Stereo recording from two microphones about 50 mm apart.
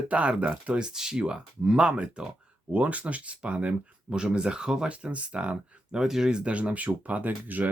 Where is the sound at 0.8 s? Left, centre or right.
Centre.